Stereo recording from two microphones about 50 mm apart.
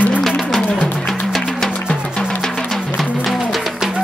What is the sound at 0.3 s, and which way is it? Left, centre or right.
Music, centre.